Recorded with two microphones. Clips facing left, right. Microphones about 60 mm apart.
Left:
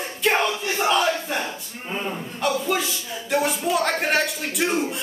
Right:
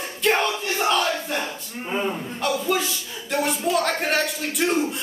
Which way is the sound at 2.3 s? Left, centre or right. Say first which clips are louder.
Left 1 dB; centre.